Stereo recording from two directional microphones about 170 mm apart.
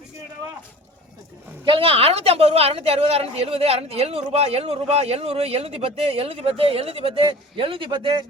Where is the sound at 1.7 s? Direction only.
30° right (ahead or behind).